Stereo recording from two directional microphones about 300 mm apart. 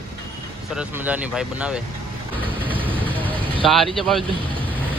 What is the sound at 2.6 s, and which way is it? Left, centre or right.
Vehicle, centre.